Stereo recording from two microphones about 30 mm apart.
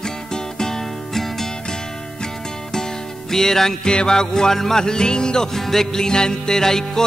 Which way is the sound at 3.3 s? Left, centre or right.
Centre.